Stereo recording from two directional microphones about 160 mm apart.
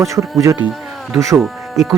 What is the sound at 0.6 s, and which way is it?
Insect, centre (ahead or behind).